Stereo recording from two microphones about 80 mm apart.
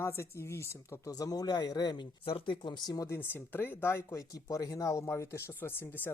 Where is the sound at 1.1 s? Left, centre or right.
Left.